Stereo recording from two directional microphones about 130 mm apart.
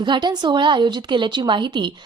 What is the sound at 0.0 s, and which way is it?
A woman's voice, 35° right (ahead or behind).